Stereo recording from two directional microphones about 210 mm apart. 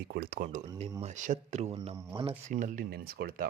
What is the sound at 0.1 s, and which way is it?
Speech, 45° right (ahead or behind).